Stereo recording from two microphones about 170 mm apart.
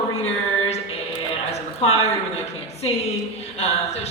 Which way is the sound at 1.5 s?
40° left (ahead or behind).